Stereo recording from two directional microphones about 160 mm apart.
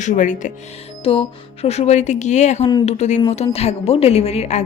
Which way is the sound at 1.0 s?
35° left (ahead or behind).